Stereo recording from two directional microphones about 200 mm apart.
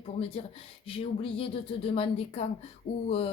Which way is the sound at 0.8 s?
25° left (ahead or behind).